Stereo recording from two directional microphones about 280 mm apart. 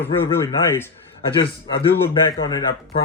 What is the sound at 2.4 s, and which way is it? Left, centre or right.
Speech, centre.